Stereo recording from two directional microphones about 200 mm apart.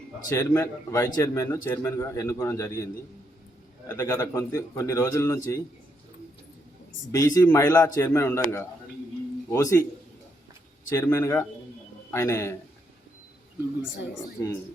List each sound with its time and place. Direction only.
0.3 s a man's voice: 15° left (ahead or behind)
7.1 s a man's voice: 15° left (ahead or behind)
10.8 s a man's voice: 10° left (ahead or behind)
14.4 s a man's voice: 10° left (ahead or behind)